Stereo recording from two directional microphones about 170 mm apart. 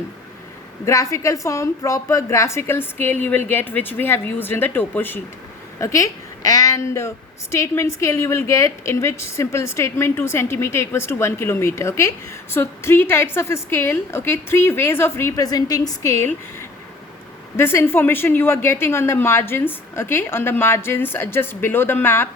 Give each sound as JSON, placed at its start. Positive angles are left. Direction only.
{"t": 0.9, "sound": "a woman's voice", "side_deg": 20}